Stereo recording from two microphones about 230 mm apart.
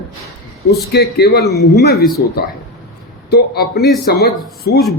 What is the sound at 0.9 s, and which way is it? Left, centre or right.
A man's voice, left.